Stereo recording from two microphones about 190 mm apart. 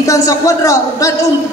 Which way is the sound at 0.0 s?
15° left (ahead or behind).